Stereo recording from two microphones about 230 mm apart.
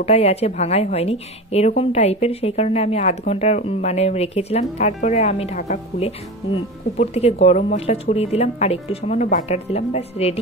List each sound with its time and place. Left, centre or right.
0.0 s a woman's voice: left